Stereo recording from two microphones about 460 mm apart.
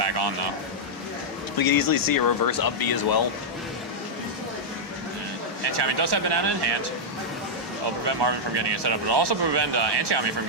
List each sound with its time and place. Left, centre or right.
0.0 s speech: right
1.5 s speech: left
5.6 s speech: right
8.0 s speech: right